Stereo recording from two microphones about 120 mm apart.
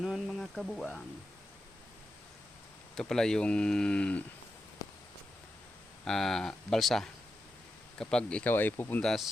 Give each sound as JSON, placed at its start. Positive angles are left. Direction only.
{"t": 0.0, "sound": "a sound", "side_deg": 0}
{"t": 2.9, "sound": "speech", "side_deg": 5}
{"t": 6.1, "sound": "speech", "side_deg": 5}
{"t": 9.0, "sound": "speech", "side_deg": 0}